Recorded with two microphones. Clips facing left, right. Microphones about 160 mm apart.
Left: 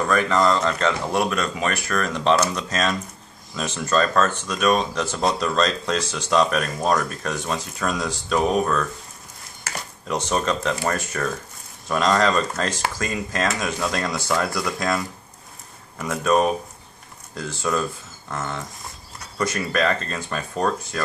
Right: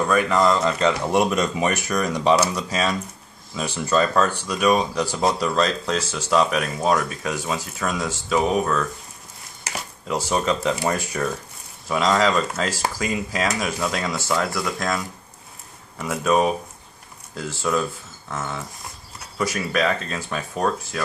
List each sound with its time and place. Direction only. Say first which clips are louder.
0.0 s speech: right 1 dB; 5° right (ahead or behind)
1.1 s speech: right 3 dB; 20° right (ahead or behind); by 8.8 s 5° right (ahead or behind)
10.0 s speech: right 1 dB; 5° right (ahead or behind)